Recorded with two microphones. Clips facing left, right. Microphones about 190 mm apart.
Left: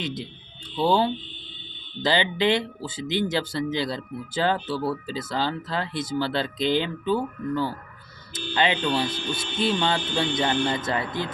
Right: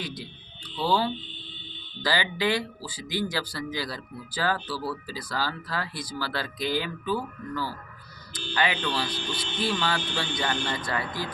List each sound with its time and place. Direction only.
0.0 s speech: 25° left (ahead or behind)